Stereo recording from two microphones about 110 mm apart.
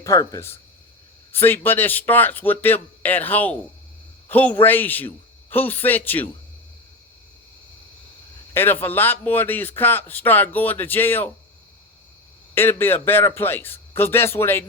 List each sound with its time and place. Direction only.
0.0 s speech: 30° left (ahead or behind)
1.3 s a man's voice: 20° left (ahead or behind)
8.5 s a man's voice: 20° left (ahead or behind)
12.5 s a man's voice: 20° left (ahead or behind)